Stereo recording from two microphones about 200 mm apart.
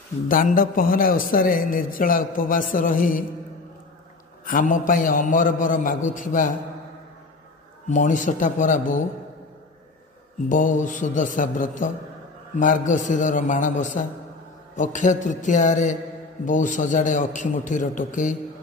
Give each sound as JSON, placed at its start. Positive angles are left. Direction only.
{"t": 0.3, "sound": "a man's voice", "side_deg": 40}
{"t": 4.5, "sound": "a man's voice", "side_deg": 40}
{"t": 7.9, "sound": "a man's voice", "side_deg": 40}
{"t": 10.5, "sound": "a man's voice", "side_deg": 40}